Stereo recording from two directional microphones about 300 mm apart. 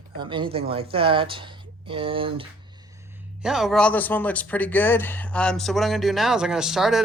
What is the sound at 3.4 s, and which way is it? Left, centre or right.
Speech, centre.